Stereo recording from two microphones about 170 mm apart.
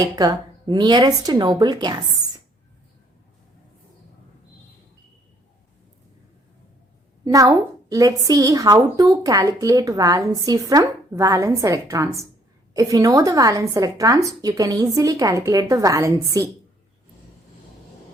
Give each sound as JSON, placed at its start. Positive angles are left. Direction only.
{"t": 0.2, "sound": "a woman's voice", "side_deg": -25}
{"t": 7.3, "sound": "a woman's voice", "side_deg": -20}